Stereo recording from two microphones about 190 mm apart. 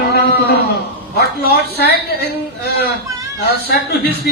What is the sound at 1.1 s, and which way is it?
A man's voice, 55° left (ahead or behind).